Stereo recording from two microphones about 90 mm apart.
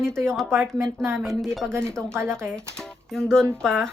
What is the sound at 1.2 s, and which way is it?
Speech, centre (ahead or behind).